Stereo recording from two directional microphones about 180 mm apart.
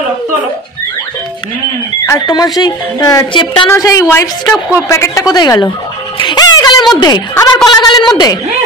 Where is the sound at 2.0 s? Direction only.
20° left (ahead or behind).